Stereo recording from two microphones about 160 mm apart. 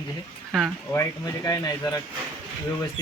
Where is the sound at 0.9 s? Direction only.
20° left (ahead or behind).